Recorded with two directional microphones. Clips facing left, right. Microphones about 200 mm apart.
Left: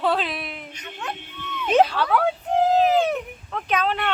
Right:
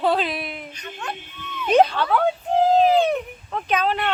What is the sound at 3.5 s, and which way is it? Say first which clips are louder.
Speech: right 1 dB; centre (ahead or behind).